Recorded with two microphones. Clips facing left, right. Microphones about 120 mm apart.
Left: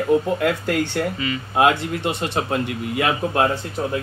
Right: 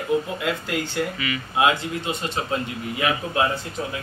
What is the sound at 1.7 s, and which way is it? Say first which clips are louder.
A man's voice: left 3 dB; 65° left (ahead or behind).